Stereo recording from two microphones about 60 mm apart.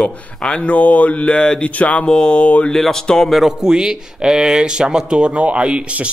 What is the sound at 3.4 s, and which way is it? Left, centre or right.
Speech, centre.